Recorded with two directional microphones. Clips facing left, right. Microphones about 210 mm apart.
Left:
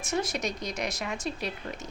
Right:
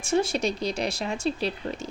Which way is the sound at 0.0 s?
30° right (ahead or behind).